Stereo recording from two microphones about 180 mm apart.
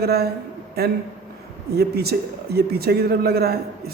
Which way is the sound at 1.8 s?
60° right (ahead or behind).